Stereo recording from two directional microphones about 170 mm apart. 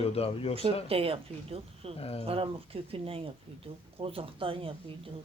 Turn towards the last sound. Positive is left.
turn(degrees=-30)  # may be behind; listen again after turning